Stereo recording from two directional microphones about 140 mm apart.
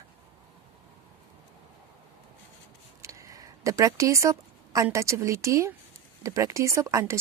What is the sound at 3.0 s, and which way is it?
A woman's voice, 25° right (ahead or behind).